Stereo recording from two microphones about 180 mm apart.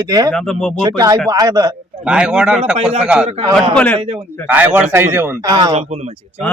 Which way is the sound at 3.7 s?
10° left (ahead or behind).